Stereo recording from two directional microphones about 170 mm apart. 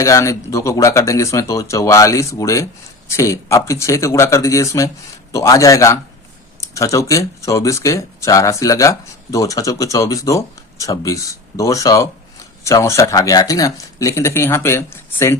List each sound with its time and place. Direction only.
0.0 s speech: 20° left (ahead or behind)